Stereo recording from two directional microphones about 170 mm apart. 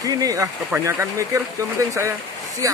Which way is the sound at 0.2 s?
20° right (ahead or behind).